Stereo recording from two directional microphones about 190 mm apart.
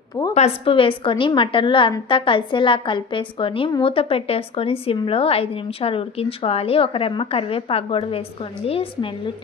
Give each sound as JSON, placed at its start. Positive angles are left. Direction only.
{"t": 0.3, "sound": "a woman's voice", "side_deg": 35}